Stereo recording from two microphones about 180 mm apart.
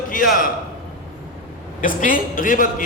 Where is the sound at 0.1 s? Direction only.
50° left (ahead or behind).